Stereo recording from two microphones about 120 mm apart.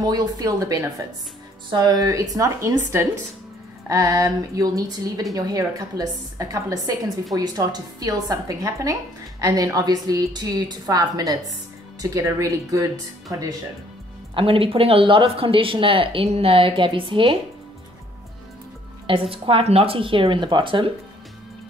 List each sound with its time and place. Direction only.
0.0 s a woman's voice: 35° right (ahead or behind)
14.3 s speech: 50° right (ahead or behind)
19.0 s speech: 50° right (ahead or behind)